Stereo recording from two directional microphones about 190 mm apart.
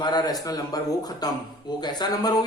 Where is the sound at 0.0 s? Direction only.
20° left (ahead or behind).